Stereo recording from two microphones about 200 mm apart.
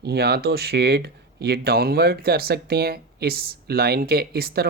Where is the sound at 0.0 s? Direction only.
55° right (ahead or behind).